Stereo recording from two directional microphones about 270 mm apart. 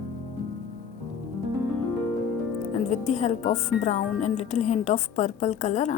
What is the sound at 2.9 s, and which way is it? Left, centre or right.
Speech, left.